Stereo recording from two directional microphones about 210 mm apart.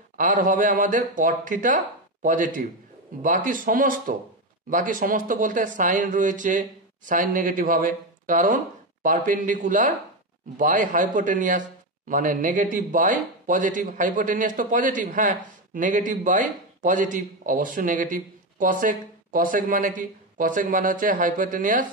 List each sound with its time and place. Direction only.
0.2 s a man's voice: 40° right (ahead or behind)